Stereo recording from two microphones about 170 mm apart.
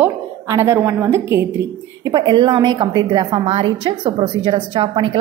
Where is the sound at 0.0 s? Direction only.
15° right (ahead or behind).